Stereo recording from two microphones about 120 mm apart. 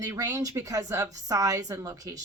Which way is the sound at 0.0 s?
25° right (ahead or behind).